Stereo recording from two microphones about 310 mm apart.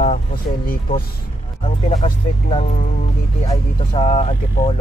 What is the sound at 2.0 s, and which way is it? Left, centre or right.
Speech, centre.